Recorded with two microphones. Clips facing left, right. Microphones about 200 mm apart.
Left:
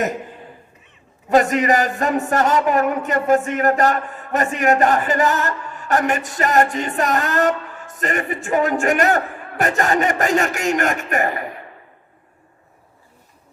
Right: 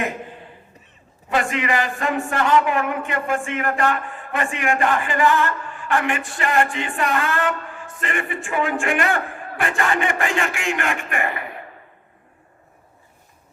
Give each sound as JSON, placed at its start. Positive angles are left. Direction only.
{"t": 1.3, "sound": "a man's voice", "side_deg": 40}